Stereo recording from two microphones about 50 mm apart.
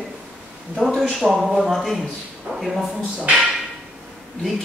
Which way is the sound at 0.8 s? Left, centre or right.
Centre.